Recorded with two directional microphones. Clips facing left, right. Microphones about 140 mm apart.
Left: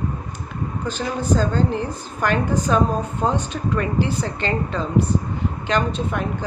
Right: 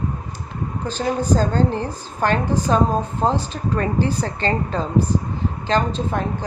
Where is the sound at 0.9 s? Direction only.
35° right (ahead or behind).